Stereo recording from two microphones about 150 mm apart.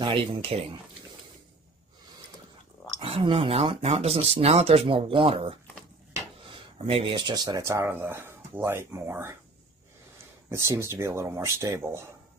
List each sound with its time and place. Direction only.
0.0 s speech: 35° right (ahead or behind)
3.0 s speech: 40° right (ahead or behind); by 9.4 s 15° right (ahead or behind)
10.5 s speech: 20° right (ahead or behind)